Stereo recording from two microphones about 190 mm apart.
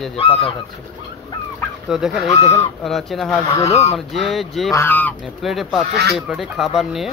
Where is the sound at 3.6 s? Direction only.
35° left (ahead or behind).